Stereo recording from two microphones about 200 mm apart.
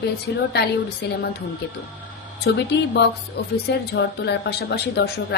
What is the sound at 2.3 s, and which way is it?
Speech, 55° left (ahead or behind).